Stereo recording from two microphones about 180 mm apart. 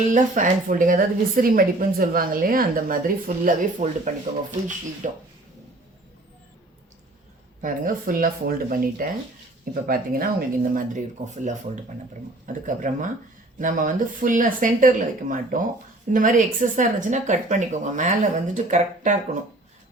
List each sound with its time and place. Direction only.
0.1 s a woman's voice: 45° right (ahead or behind)
7.6 s a woman's voice: 50° right (ahead or behind)